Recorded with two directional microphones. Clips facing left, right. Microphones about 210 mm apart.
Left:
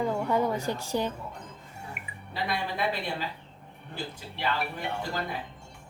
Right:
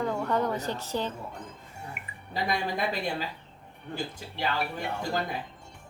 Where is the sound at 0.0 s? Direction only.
10° left (ahead or behind).